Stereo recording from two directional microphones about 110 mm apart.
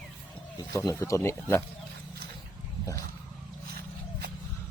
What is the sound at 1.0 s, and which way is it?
Speech, 25° left (ahead or behind).